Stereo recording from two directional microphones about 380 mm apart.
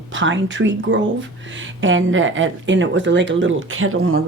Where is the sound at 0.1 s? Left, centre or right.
Right.